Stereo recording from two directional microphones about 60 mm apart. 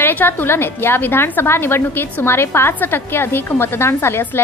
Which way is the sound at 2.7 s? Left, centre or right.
Left.